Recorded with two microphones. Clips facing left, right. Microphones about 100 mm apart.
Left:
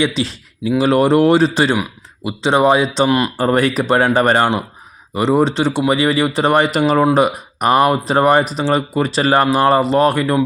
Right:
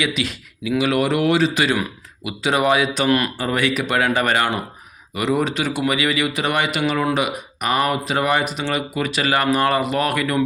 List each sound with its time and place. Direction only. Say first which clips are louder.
0.0 s speech: left 5 dB; 30° left (ahead or behind)
3.3 s speech: left 6 dB; 40° left (ahead or behind)